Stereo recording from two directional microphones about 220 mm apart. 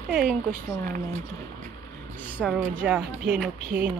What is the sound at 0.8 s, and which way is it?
Speech, 40° right (ahead or behind).